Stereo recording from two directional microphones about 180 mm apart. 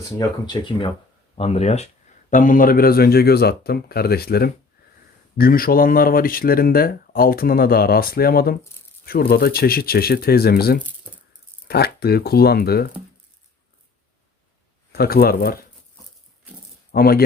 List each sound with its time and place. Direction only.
0.2 s speech: 25° left (ahead or behind)
1.4 s speech: 35° left (ahead or behind)
2.3 s speech: 45° left (ahead or behind)
14.9 s speech: 60° left (ahead or behind)
16.9 s speech: 60° left (ahead or behind)